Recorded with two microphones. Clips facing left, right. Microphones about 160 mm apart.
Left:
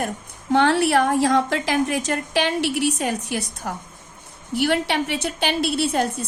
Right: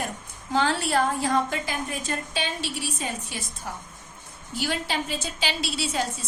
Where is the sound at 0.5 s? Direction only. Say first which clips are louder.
Left 6 dB; 65° left (ahead or behind).